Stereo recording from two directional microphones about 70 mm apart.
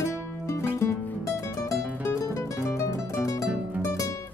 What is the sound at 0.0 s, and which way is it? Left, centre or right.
Music, left.